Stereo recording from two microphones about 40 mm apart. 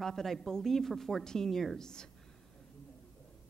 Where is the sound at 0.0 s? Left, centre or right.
Centre.